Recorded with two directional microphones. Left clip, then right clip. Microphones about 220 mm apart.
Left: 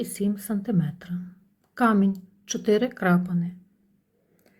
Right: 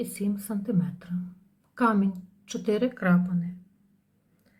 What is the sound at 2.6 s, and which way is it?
Speech, 35° left (ahead or behind).